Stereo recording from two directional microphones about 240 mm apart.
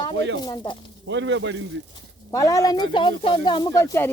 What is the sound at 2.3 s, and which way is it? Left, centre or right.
Speech, centre.